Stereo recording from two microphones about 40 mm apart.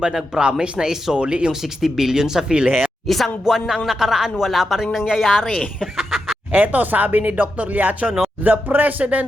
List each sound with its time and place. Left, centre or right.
0.0 s speech: right
1.1 s speech: right
1.8 s speech: centre
3.1 s speech: centre
3.4 s speech: centre
6.0 s fowl: centre
6.5 s speech: right